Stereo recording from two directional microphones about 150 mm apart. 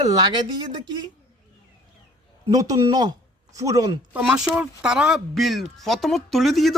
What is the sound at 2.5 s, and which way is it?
Speech, 25° right (ahead or behind).